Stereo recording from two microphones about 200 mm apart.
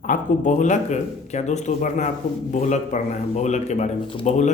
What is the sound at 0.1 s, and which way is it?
A man's voice, 40° left (ahead or behind).